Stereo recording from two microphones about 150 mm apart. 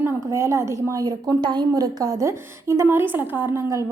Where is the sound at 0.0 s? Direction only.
20° right (ahead or behind).